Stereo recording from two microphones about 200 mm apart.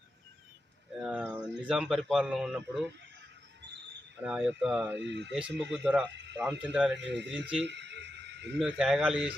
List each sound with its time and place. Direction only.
0.9 s a sound: 5° right (ahead or behind)
1.6 s a man's voice: centre (ahead or behind)
4.2 s a man's voice: 5° right (ahead or behind)
4.9 s speech: 60° right (ahead or behind)
5.3 s a man's voice: 5° right (ahead or behind)
6.9 s speech: 60° right (ahead or behind)
7.6 s a sound: 60° right (ahead or behind)
8.5 s a man's voice: centre (ahead or behind)